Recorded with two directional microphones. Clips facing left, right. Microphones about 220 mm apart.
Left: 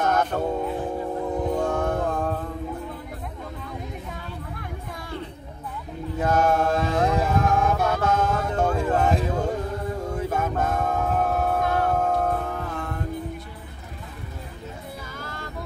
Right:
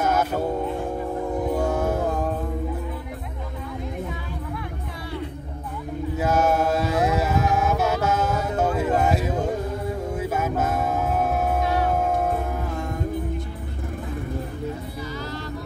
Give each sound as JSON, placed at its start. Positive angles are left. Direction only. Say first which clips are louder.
{"t": 0.0, "sound": "music", "louder": "right 1 dB", "side_deg": -5}
{"t": 6.1, "sound": "mantra", "louder": "even", "side_deg": -5}
{"t": 10.1, "sound": "music", "louder": "right 1 dB", "side_deg": -5}
{"t": 15.1, "sound": "music", "louder": "right 6 dB", "side_deg": 50}